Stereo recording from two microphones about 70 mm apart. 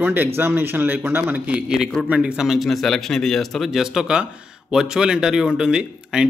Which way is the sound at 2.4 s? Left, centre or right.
Centre.